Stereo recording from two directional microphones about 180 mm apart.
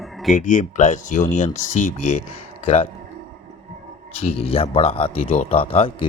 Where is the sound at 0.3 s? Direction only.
45° left (ahead or behind).